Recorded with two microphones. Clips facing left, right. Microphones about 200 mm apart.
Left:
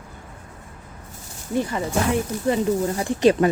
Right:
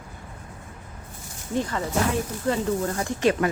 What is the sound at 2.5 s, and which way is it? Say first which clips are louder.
Speech: left 4 dB; 15° left (ahead or behind).